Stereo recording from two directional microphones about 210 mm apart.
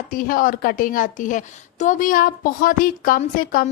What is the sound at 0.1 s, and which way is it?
A woman's voice, 40° left (ahead or behind).